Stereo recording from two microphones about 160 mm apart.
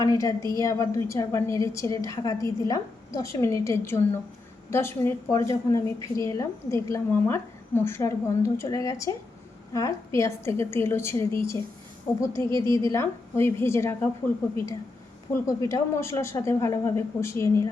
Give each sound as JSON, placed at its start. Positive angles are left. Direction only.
{"t": 0.0, "sound": "a woman's voice", "side_deg": 20}
{"t": 12.4, "sound": "a woman's voice", "side_deg": 20}
{"t": 12.6, "sound": "a woman's voice", "side_deg": -30}
{"t": 12.9, "sound": "a woman's voice", "side_deg": 15}
{"t": 15.3, "sound": "a woman's voice", "side_deg": 20}